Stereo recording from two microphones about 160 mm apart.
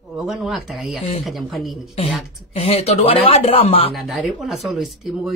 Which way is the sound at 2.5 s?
40° left (ahead or behind).